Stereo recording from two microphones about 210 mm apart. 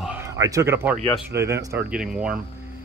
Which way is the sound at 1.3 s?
55° right (ahead or behind).